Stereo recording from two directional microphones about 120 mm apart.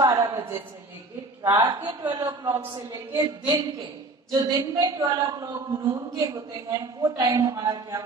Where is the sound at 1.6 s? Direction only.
40° right (ahead or behind).